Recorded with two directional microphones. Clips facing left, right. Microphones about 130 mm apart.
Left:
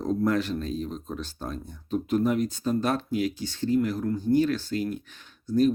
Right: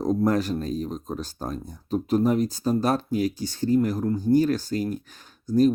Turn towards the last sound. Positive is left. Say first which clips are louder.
# right 3 dB
turn(degrees=-40)  # may be behind; listen again after turning